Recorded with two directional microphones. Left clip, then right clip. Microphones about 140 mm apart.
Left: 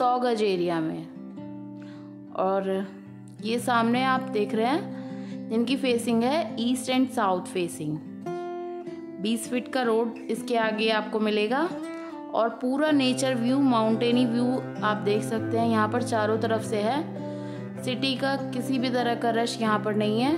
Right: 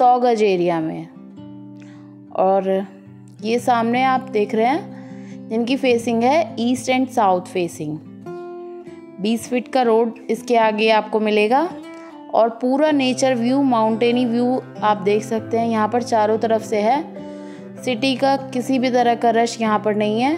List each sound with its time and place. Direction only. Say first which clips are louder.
0.0 s a woman's voice: right 9 dB; 30° right (ahead or behind)
2.3 s speech: right 9 dB; 30° right (ahead or behind)
9.2 s a woman's voice: right 8 dB; 30° right (ahead or behind)